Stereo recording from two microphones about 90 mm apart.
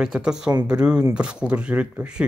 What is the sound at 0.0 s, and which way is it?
Speech, 10° right (ahead or behind).